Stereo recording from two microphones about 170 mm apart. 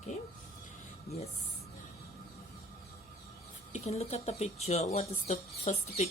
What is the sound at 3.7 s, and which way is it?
Speech, 40° left (ahead or behind).